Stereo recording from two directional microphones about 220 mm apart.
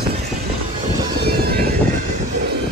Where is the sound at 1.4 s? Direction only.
45° right (ahead or behind).